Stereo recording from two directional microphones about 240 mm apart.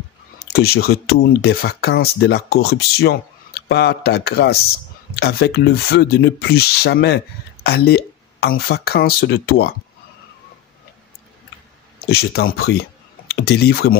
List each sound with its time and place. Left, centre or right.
0.4 s speech: left
12.1 s speech: left